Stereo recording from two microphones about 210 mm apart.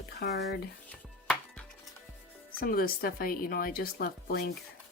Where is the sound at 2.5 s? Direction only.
45° left (ahead or behind).